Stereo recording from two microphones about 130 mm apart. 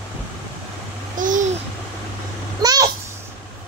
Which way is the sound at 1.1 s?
85° right.